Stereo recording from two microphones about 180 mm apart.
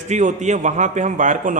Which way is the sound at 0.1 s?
40° right (ahead or behind).